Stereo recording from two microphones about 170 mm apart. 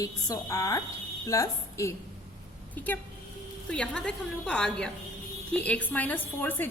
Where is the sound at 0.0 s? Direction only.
20° left (ahead or behind).